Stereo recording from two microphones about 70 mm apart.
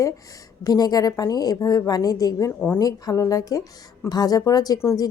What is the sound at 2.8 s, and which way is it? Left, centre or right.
Speech, left.